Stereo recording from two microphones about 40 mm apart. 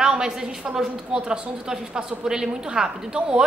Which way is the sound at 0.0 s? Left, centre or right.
Centre.